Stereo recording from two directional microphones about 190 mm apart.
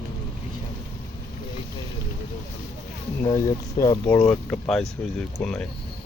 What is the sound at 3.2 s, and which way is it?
Speech, 15° left (ahead or behind).